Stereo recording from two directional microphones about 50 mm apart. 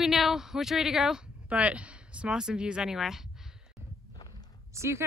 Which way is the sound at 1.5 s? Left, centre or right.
Right.